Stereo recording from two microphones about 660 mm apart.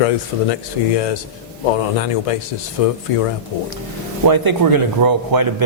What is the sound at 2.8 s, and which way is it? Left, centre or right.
Speech, left.